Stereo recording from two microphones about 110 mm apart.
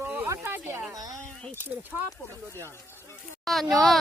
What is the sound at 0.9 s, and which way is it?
Speech, 35° right (ahead or behind).